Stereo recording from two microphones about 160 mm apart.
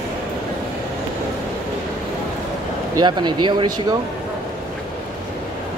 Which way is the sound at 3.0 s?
30° right (ahead or behind).